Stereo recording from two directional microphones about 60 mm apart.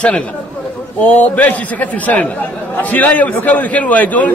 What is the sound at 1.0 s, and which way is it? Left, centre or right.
A man's voice, left.